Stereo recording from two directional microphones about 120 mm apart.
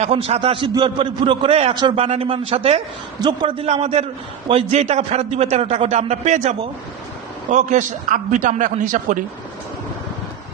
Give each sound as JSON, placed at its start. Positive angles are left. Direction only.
{"t": 0.0, "sound": "a man's voice", "side_deg": -55}
{"t": 3.2, "sound": "a man's voice", "side_deg": -40}
{"t": 3.7, "sound": "a man's voice", "side_deg": -60}
{"t": 7.5, "sound": "a man's voice", "side_deg": -90}